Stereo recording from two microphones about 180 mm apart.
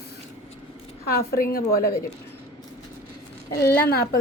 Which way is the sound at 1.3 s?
55° left (ahead or behind).